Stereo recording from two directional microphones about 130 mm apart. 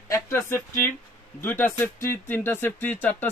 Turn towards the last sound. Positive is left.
turn(degrees=15)  # may be behind; listen again after turning